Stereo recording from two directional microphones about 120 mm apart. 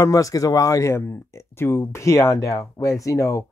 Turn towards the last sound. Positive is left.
turn(degrees=25)  # may be behind; listen again after turning